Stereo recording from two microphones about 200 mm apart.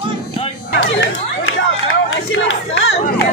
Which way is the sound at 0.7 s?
75° left (ahead or behind).